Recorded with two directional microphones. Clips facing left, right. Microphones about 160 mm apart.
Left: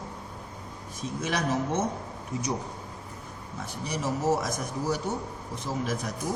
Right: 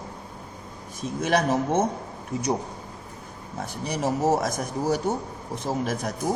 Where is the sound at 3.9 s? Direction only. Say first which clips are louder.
Right 4 dB; 55° right (ahead or behind).